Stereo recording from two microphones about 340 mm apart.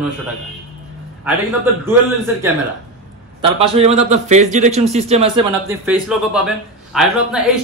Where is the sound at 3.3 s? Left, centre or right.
Centre.